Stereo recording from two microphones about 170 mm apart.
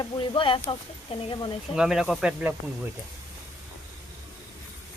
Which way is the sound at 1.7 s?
5° right (ahead or behind).